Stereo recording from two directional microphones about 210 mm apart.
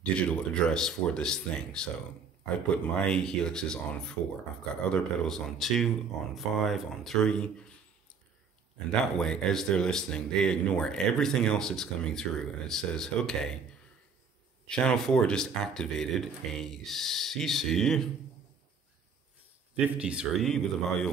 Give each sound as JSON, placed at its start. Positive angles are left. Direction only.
{"t": 0.0, "sound": "speech", "side_deg": 5}
{"t": 9.2, "sound": "speech", "side_deg": 5}
{"t": 14.7, "sound": "speech", "side_deg": 5}
{"t": 19.7, "sound": "speech", "side_deg": -5}